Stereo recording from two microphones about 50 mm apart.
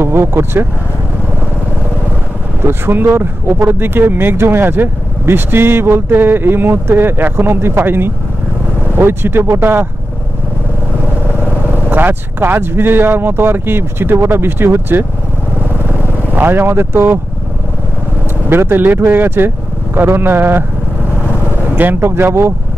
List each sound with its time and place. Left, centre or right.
0.0 s speech: right
2.6 s speech: right
11.9 s speech: right
16.3 s speech: right
18.5 s speech: right
22.0 s speech: right